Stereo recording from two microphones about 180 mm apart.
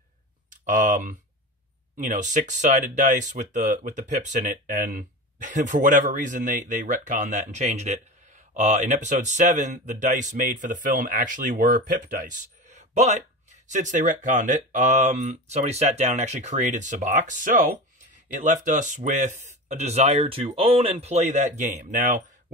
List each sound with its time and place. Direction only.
0.7 s speech: 45° right (ahead or behind)